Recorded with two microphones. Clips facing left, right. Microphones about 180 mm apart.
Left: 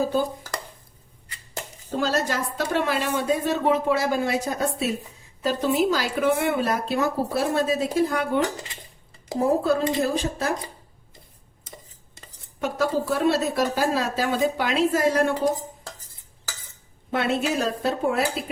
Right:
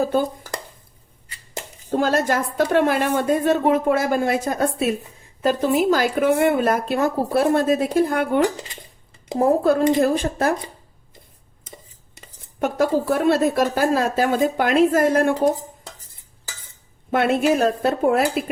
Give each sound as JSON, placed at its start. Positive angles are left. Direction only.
{"t": 1.9, "sound": "a woman's voice", "side_deg": -50}
{"t": 9.6, "sound": "a woman's voice", "side_deg": -55}
{"t": 12.5, "sound": "a woman's voice", "side_deg": -55}
{"t": 17.1, "sound": "a woman's voice", "side_deg": -55}